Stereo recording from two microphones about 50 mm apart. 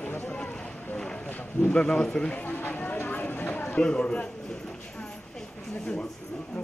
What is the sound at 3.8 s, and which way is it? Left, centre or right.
Speech, left.